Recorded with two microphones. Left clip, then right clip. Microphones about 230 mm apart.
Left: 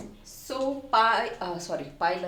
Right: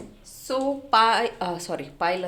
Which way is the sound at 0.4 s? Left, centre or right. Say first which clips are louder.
Right 4 dB; right.